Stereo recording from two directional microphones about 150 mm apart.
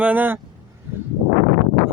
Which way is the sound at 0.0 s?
10° right (ahead or behind).